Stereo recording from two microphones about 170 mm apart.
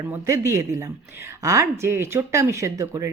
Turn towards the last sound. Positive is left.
turn(degrees=-20)  # may be behind; listen again after turning